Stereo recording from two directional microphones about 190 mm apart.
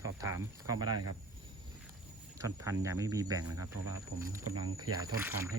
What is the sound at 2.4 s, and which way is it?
Speech, 15° right (ahead or behind).